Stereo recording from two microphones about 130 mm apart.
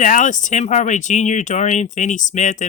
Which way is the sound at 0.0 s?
80° left.